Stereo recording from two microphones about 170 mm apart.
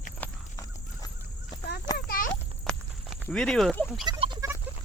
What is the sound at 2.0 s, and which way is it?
Clip-clop, 55° left (ahead or behind).